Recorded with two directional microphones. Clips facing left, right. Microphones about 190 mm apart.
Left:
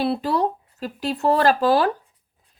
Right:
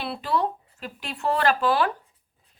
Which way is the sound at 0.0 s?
40° left (ahead or behind).